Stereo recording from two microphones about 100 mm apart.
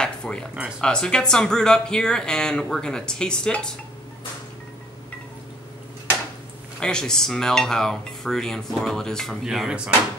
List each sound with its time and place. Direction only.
0.0 s a sound: 10° left (ahead or behind)
0.7 s speech: 5° left (ahead or behind)
6.8 s speech: 5° left (ahead or behind)